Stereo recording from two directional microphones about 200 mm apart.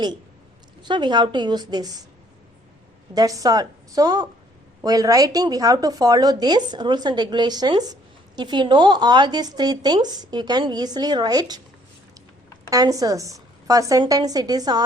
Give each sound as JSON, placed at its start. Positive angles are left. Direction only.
{"t": 0.8, "sound": "speech", "side_deg": -20}
{"t": 3.2, "sound": "speech", "side_deg": -15}
{"t": 12.7, "sound": "a woman's voice", "side_deg": -20}